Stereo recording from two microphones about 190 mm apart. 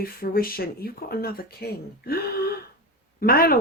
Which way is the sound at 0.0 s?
50° left (ahead or behind).